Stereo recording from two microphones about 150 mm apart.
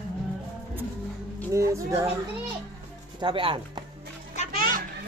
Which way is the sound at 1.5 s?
20° right (ahead or behind).